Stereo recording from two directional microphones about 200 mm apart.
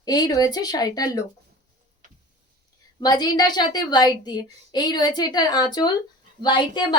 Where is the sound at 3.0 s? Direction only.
20° left (ahead or behind).